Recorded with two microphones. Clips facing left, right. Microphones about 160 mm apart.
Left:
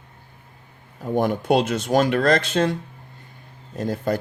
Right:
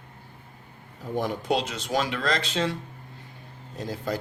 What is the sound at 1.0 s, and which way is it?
Speech, 55° left (ahead or behind).